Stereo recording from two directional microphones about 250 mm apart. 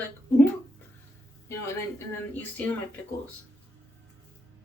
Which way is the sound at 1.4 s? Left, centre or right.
Centre.